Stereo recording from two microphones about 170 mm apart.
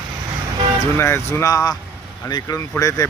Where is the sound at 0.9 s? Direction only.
15° left (ahead or behind).